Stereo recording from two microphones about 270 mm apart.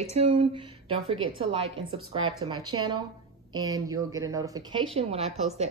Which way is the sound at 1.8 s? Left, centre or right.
Centre.